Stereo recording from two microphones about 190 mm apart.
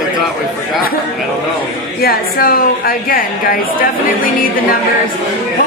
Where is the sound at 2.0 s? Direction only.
50° left (ahead or behind).